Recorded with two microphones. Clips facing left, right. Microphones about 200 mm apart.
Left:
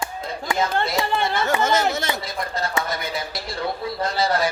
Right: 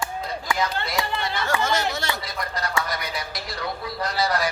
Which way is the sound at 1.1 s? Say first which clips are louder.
Left 6 dB; 50° left (ahead or behind).